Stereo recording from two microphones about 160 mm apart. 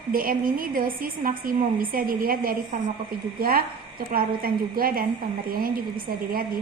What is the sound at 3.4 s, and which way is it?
A woman's voice, 65° right (ahead or behind).